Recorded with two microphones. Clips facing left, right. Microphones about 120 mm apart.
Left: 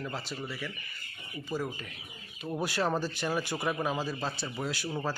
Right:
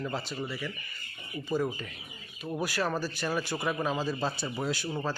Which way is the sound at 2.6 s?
25° left (ahead or behind).